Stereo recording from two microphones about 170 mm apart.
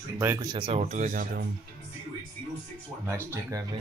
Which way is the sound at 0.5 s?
30° right (ahead or behind).